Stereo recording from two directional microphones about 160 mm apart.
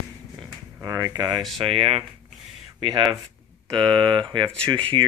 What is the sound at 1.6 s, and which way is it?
Speech, 35° right (ahead or behind).